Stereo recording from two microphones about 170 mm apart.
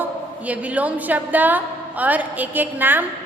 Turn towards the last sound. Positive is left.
turn(degrees=-10)  # may be behind; listen again after turning